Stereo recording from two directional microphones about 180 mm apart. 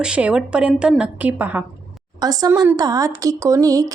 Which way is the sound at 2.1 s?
20° right (ahead or behind).